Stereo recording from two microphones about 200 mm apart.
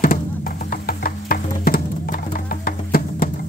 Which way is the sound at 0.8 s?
45° left (ahead or behind).